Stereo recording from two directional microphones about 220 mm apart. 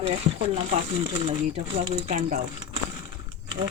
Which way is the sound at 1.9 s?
35° right (ahead or behind).